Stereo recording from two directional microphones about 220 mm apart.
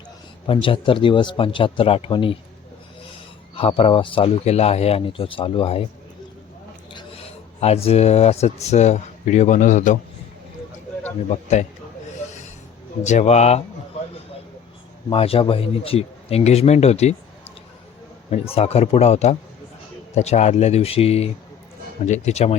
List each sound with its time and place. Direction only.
0.4 s speech: 25° left (ahead or behind)
3.5 s speech: 25° left (ahead or behind)
6.9 s speech: 25° left (ahead or behind)
13.0 s speech: 35° left (ahead or behind)
15.1 s speech: 25° left (ahead or behind)
18.3 s speech: 25° left (ahead or behind)